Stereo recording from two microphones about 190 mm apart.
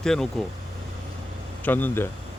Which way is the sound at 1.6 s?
10° left (ahead or behind).